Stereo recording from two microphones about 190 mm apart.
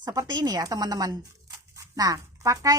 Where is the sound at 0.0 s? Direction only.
20° right (ahead or behind).